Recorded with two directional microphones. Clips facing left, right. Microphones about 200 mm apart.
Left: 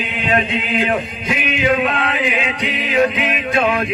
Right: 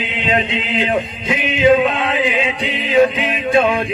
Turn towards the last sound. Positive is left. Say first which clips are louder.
# right 3 dB
turn(degrees=-25)  # may be behind; listen again after turning